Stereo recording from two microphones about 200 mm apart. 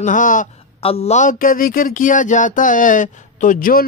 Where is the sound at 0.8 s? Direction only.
30° left (ahead or behind).